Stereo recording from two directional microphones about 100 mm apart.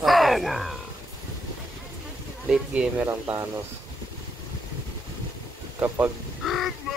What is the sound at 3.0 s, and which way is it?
Speech, 25° right (ahead or behind).